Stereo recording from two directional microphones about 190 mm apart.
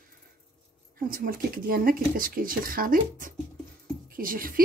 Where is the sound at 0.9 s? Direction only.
50° right (ahead or behind).